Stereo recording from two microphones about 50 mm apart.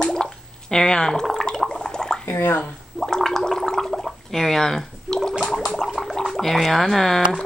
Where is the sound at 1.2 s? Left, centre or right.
Centre.